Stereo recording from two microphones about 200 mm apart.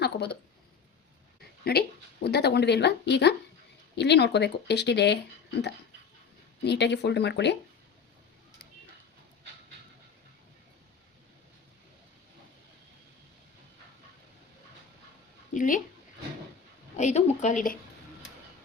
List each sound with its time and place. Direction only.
0.0 s speech: 55° left (ahead or behind)
2.2 s speech: 55° left (ahead or behind)
15.5 s speech: 40° left (ahead or behind)
17.0 s speech: 35° left (ahead or behind)